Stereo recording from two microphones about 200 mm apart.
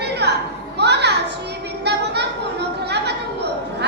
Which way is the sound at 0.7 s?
55° right (ahead or behind).